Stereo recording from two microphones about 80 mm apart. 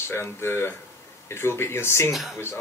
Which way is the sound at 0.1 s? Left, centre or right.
Left.